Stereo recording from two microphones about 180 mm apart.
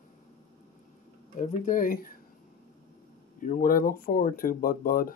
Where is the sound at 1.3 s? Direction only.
45° left (ahead or behind).